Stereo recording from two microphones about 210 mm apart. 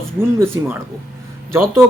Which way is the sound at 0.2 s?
10° right (ahead or behind).